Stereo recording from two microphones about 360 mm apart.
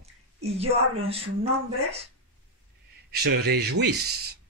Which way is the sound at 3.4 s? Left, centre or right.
Right.